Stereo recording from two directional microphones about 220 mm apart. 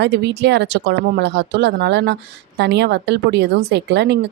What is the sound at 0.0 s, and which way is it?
Speech, 50° right (ahead or behind).